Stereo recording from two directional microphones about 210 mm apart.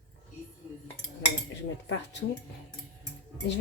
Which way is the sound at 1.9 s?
55° left (ahead or behind).